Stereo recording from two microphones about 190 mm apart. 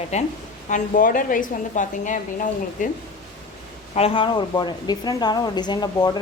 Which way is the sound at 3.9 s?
30° left (ahead or behind).